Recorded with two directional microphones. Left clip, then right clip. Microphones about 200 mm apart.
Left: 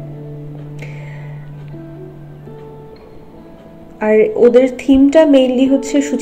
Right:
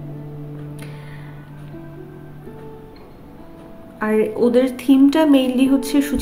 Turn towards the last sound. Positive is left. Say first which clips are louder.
# left 4 dB
turn(degrees=0)  # may be behind; listen again after turning